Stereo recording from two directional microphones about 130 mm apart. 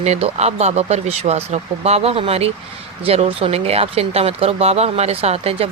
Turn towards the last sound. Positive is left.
turn(degrees=-50)  # may be behind; listen again after turning